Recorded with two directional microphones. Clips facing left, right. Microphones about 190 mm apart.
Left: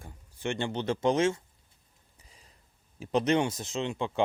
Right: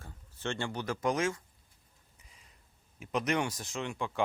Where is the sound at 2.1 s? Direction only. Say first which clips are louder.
Left 4 dB; 35° left (ahead or behind).